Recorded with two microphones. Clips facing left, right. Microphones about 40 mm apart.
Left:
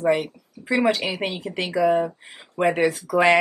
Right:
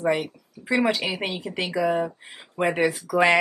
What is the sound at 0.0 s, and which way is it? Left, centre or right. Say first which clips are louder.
Speech: left 3 dB; centre.